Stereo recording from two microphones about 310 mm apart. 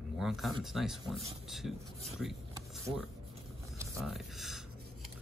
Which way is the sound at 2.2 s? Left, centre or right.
Centre.